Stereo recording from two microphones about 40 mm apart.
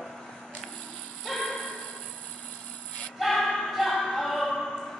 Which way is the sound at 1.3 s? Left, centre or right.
Centre.